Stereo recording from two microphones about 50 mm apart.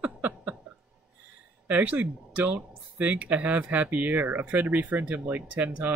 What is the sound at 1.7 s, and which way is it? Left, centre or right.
Speech, right.